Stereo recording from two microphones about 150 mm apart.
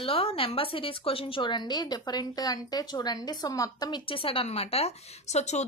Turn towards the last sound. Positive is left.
turn(degrees=50)  # may be behind; listen again after turning